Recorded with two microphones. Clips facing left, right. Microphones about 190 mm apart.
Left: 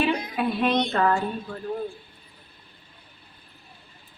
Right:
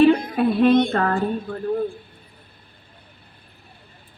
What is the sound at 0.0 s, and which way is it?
Speech, 55° right (ahead or behind).